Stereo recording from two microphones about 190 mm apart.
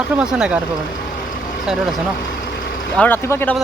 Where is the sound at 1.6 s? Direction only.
Centre (ahead or behind).